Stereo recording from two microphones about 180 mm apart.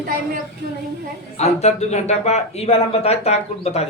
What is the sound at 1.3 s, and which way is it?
Speech, 35° left (ahead or behind).